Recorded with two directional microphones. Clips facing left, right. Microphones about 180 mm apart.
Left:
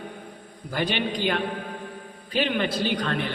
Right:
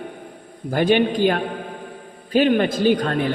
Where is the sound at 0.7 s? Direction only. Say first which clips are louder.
Right 9 dB; 50° right (ahead or behind).